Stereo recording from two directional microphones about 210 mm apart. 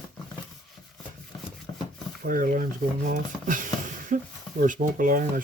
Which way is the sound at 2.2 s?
40° right (ahead or behind).